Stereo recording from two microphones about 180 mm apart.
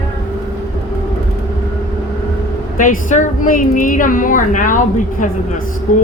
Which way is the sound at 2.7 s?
45° left (ahead or behind).